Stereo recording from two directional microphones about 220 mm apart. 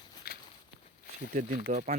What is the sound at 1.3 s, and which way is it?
Speech, 40° right (ahead or behind).